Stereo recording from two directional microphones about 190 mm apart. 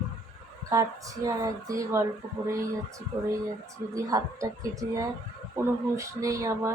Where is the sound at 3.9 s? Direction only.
20° right (ahead or behind).